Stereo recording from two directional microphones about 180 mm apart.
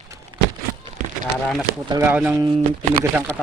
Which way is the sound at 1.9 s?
10° right (ahead or behind).